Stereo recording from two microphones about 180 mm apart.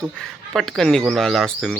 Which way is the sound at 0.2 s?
Centre (ahead or behind).